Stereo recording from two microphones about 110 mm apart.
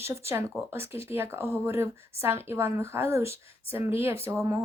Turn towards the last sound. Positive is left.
turn(degrees=-25)  # may be behind; listen again after turning